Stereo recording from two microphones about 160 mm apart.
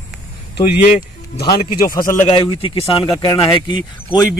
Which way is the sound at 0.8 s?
70° left (ahead or behind).